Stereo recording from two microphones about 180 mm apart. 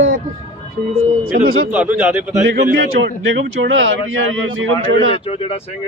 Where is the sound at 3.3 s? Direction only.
90° right.